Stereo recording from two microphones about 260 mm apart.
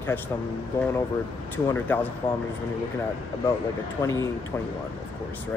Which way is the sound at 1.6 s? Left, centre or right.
Centre.